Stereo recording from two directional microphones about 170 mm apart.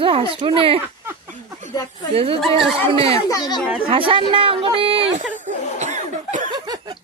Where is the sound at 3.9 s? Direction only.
30° right (ahead or behind).